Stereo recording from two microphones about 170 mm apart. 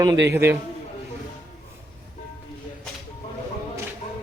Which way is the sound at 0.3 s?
15° right (ahead or behind).